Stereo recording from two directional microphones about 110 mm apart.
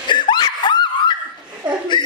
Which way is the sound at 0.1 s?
45° left (ahead or behind).